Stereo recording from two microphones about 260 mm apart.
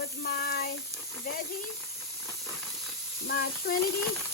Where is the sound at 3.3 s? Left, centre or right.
Left.